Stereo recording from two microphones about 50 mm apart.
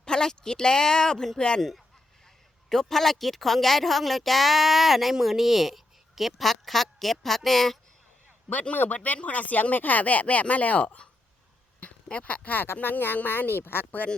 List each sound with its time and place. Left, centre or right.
0.0 s speech: centre
2.6 s a woman's voice: centre
8.7 s speech: left